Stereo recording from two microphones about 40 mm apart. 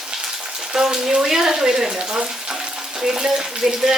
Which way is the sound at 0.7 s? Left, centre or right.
Centre.